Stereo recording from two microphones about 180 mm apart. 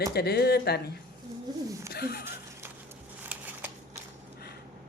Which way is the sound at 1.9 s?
60° left (ahead or behind).